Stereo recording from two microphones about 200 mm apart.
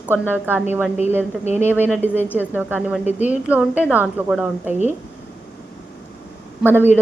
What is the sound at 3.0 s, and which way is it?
Speech, 35° left (ahead or behind).